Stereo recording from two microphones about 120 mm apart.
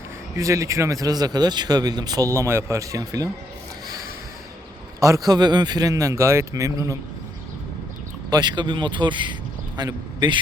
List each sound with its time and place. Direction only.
0.3 s speech: 25° right (ahead or behind)
4.9 s speech: 30° right (ahead or behind)
8.3 s a man's voice: 35° right (ahead or behind)